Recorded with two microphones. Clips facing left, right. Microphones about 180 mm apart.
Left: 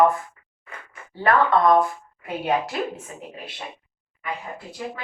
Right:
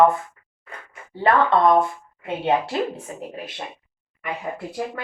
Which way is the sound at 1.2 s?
25° right (ahead or behind).